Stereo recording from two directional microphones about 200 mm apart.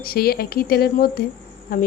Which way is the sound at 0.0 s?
50° left (ahead or behind).